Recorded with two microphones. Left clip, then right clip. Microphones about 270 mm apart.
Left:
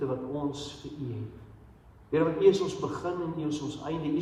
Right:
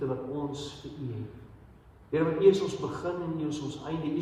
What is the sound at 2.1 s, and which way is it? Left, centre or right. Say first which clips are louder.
A man's voice: even; left.